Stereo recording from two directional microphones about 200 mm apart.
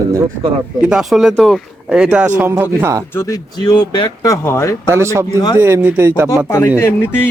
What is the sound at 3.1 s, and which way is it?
Speech, 15° left (ahead or behind).